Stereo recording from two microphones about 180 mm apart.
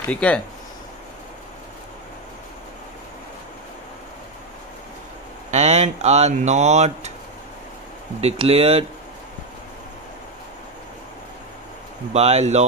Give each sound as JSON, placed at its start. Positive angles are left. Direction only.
{"t": 0.1, "sound": "speech", "side_deg": 5}
{"t": 5.5, "sound": "speech", "side_deg": -40}
{"t": 8.2, "sound": "speech", "side_deg": -35}
{"t": 12.1, "sound": "speech", "side_deg": -35}